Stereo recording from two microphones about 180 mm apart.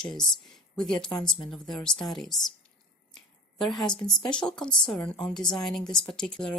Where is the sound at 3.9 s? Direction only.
25° left (ahead or behind).